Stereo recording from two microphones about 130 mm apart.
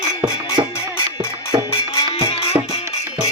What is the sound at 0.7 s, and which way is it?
Music, 20° left (ahead or behind).